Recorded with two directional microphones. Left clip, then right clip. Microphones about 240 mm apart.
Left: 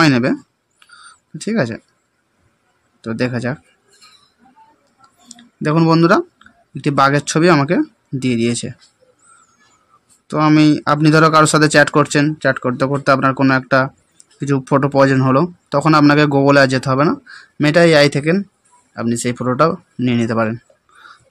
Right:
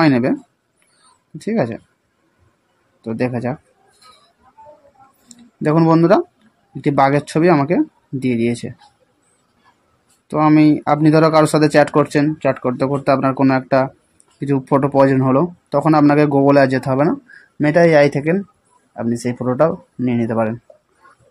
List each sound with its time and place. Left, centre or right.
0.0 s speech: left
1.4 s speech: left
3.0 s speech: left
5.3 s a sound: left
6.8 s speech: left
10.3 s speech: left